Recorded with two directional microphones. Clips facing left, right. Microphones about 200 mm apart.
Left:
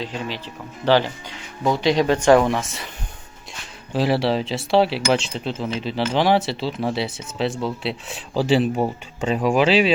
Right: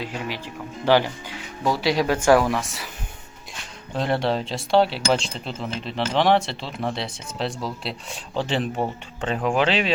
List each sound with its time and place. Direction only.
0.0 s speech: 10° right (ahead or behind)
2.3 s speech: 20° left (ahead or behind)
2.6 s speech: centre (ahead or behind)
3.9 s speech: 5° left (ahead or behind)